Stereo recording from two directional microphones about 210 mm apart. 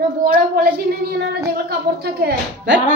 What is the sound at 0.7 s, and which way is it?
Speech, 45° right (ahead or behind).